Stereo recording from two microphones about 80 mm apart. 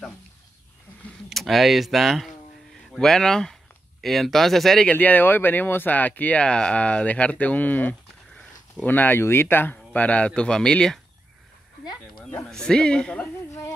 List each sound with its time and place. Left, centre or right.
1.3 s speech: centre
4.8 s speech: centre
11.8 s a sound: left
12.4 s speech: centre
13.5 s music: left